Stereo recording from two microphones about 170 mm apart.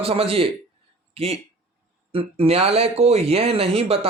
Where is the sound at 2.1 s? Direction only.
35° right (ahead or behind).